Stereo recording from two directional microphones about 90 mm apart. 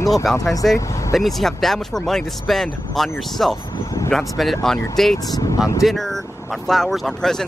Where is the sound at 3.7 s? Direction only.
40° left (ahead or behind).